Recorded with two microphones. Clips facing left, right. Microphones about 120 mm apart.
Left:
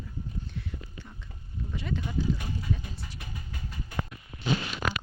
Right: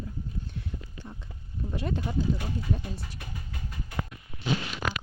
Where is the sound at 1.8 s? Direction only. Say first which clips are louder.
Right 2 dB; 45° right (ahead or behind).